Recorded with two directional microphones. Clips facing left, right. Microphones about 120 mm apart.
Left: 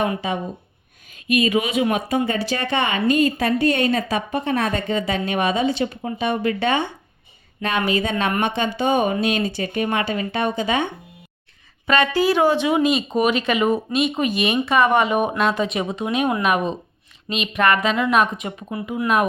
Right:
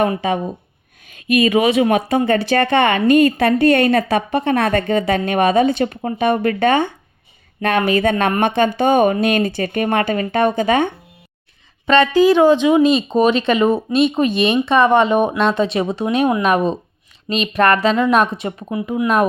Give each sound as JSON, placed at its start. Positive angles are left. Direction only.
{"t": 0.2, "sound": "a woman's voice", "side_deg": -55}
{"t": 11.9, "sound": "speech", "side_deg": -20}